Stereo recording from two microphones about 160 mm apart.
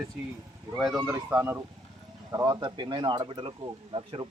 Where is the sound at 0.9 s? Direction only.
15° right (ahead or behind).